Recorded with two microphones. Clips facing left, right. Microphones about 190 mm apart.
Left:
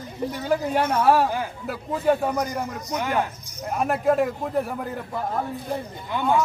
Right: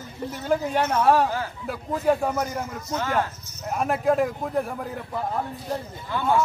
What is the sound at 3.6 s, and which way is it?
A man's voice, centre (ahead or behind).